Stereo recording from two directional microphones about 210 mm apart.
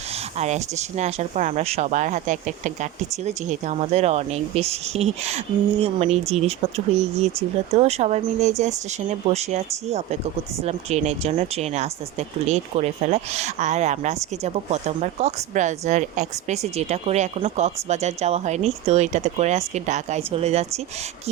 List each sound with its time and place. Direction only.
0.3 s speech: 30° right (ahead or behind)